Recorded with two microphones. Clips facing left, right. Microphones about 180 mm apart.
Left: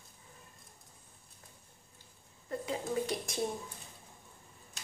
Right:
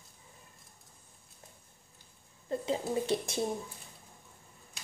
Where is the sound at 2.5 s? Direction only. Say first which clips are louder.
Right 3 dB; 25° right (ahead or behind).